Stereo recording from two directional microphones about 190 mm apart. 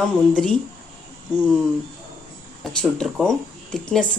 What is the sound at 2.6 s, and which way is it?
Speech, centre (ahead or behind).